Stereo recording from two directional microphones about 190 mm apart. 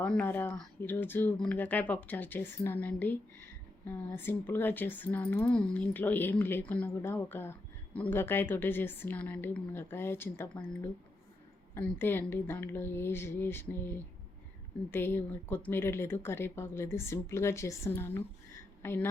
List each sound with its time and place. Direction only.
0.0 s speech: 10° left (ahead or behind)
11.7 s a woman's voice: 10° left (ahead or behind)